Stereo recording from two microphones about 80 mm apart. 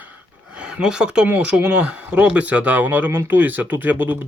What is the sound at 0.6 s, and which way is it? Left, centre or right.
Speech, centre.